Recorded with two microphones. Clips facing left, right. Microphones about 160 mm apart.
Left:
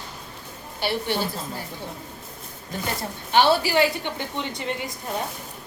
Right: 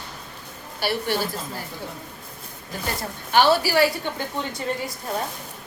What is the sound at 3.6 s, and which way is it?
Speech, 20° left (ahead or behind).